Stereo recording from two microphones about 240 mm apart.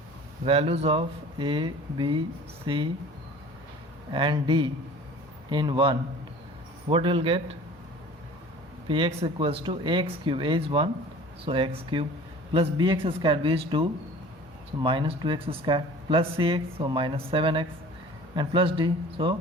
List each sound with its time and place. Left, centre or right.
0.4 s speech: right
4.1 s a man's voice: centre
8.9 s speech: right